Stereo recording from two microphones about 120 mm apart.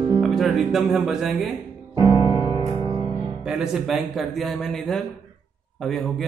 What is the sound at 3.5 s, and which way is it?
A man's voice, 5° right (ahead or behind).